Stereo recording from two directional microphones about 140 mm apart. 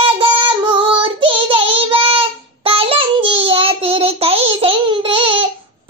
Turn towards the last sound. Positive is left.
turn(degrees=-40)  # may be behind; listen again after turning